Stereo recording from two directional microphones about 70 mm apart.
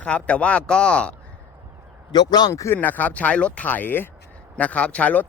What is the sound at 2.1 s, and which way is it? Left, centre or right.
Speech, left.